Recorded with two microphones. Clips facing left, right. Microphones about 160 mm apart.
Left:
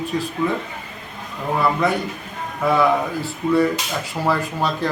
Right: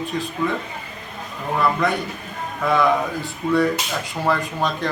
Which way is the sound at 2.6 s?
10° left (ahead or behind).